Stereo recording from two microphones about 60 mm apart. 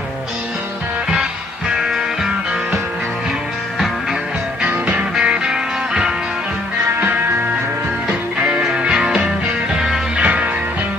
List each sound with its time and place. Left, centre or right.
4.6 s music: right
8.1 s music: right